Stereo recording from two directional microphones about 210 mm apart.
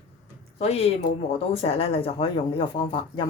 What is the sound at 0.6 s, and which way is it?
Speech, 30° left (ahead or behind).